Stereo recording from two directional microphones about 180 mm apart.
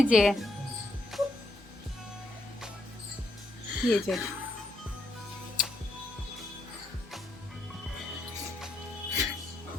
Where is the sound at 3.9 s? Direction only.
Centre (ahead or behind).